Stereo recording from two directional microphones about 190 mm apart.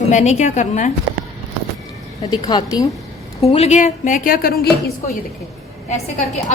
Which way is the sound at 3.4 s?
35° left (ahead or behind).